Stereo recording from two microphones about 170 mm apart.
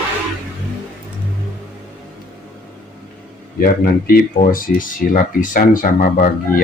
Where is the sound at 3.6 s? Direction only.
60° left (ahead or behind).